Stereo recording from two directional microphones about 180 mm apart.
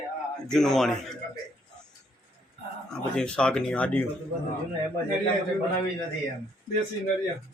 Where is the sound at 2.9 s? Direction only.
5° left (ahead or behind).